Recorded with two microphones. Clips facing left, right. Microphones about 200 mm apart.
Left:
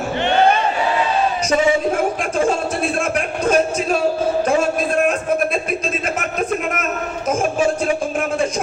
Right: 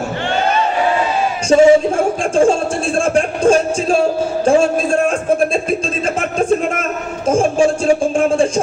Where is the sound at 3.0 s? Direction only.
30° right (ahead or behind).